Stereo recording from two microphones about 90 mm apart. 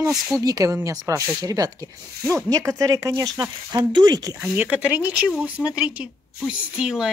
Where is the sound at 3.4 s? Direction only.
50° right (ahead or behind).